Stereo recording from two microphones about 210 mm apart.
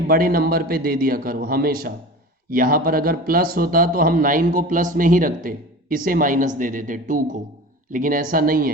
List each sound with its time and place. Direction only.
0.1 s a man's voice: 45° right (ahead or behind)